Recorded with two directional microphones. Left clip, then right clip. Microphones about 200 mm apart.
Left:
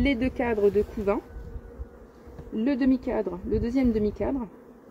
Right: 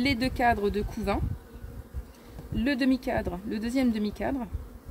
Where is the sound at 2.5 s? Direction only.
45° right (ahead or behind).